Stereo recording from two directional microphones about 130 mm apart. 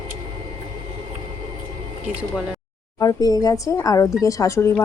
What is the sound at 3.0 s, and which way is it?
Speech, 30° left (ahead or behind).